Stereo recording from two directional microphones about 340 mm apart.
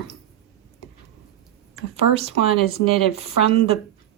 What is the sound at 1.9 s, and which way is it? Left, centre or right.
A woman's voice, centre.